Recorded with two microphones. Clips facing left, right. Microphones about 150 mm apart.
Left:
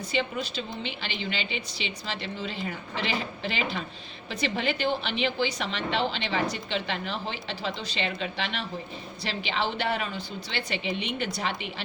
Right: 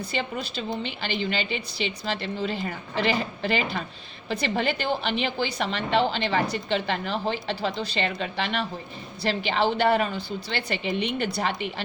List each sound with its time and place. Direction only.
0.1 s a woman's voice: 40° right (ahead or behind)